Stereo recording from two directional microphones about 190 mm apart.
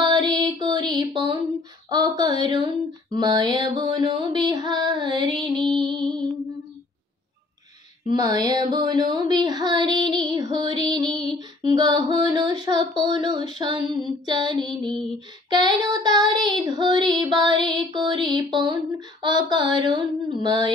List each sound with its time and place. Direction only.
0.0 s music: 25° right (ahead or behind)
1.9 s female singing: 20° right (ahead or behind)
5.8 s music: 25° right (ahead or behind)
8.1 s female singing: 20° right (ahead or behind)